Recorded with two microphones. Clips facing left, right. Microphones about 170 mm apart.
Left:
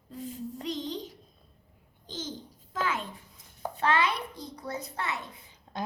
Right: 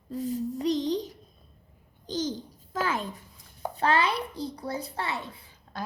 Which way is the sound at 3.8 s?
35° right (ahead or behind).